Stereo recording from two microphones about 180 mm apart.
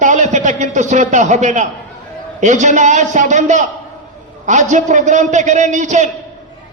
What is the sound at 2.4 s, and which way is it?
A man's voice, 40° right (ahead or behind).